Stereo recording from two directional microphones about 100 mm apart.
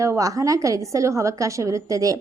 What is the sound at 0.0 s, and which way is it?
A woman's voice, 30° right (ahead or behind).